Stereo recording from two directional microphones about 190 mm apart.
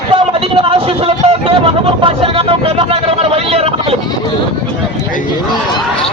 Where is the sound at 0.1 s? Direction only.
30° right (ahead or behind).